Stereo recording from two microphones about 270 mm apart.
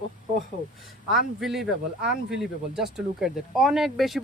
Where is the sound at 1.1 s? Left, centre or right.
Centre.